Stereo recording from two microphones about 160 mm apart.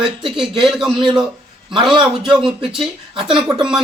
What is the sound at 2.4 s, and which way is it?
Speech, 30° right (ahead or behind).